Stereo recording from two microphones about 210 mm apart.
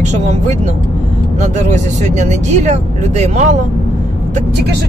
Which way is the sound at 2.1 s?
35° right (ahead or behind).